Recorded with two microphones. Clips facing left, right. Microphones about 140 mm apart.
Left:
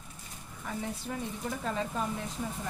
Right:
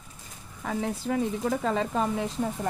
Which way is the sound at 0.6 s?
90° right.